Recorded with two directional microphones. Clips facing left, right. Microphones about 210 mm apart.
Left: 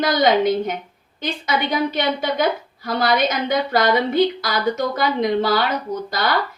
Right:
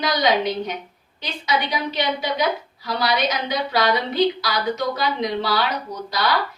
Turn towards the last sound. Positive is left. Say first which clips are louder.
# left 2 dB
turn(degrees=50)  # may be behind; listen again after turning